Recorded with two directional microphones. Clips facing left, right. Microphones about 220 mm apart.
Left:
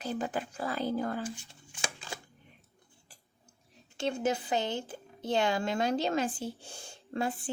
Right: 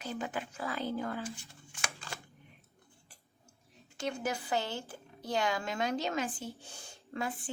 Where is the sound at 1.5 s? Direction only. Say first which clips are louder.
Left 4 dB; 30° left (ahead or behind).